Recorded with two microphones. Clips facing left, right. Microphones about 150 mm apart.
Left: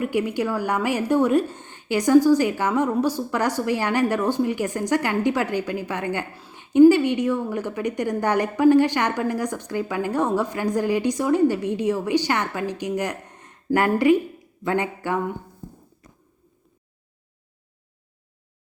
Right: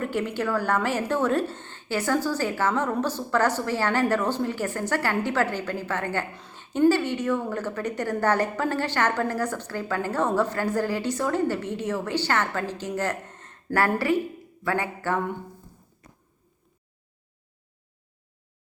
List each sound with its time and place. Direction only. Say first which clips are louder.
0.0 s a woman's voice: left 4 dB; 10° left (ahead or behind)